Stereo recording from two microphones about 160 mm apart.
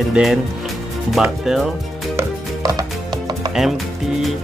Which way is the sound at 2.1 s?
20° right (ahead or behind).